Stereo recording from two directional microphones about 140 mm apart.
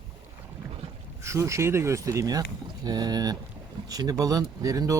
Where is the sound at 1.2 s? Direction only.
20° right (ahead or behind).